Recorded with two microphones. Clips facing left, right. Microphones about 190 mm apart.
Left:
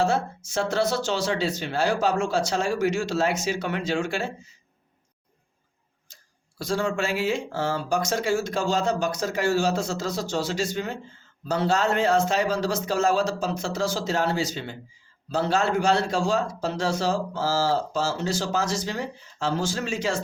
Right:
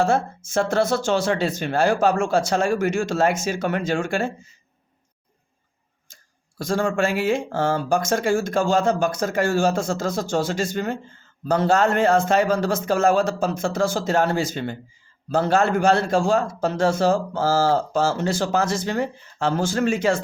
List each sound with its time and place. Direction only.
0.0 s a man's voice: 50° right (ahead or behind)
6.6 s a man's voice: 50° right (ahead or behind)